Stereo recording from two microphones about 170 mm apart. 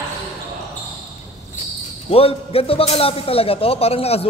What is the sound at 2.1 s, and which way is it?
A man's voice, 35° left (ahead or behind).